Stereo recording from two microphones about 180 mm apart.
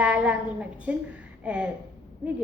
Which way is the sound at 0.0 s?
5° right (ahead or behind).